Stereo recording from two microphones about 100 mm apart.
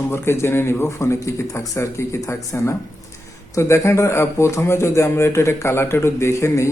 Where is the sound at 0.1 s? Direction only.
25° left (ahead or behind).